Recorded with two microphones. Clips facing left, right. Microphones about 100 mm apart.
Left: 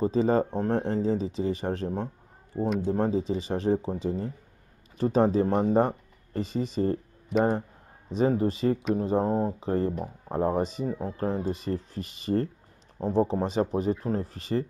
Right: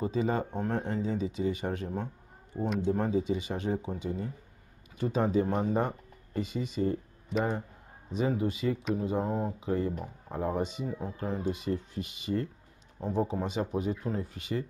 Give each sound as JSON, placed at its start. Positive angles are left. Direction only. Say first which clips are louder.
{"t": 0.0, "sound": "speech", "louder": "left 6 dB", "side_deg": 35}
{"t": 2.5, "sound": "speech", "louder": "left 4 dB", "side_deg": 5}
{"t": 2.9, "sound": "speech", "louder": "even", "side_deg": 30}
{"t": 8.2, "sound": "speech", "louder": "left 5 dB", "side_deg": 40}